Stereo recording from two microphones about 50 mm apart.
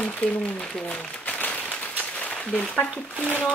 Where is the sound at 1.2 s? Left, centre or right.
Left.